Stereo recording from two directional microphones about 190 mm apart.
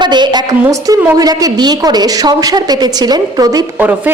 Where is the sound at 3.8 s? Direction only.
10° right (ahead or behind).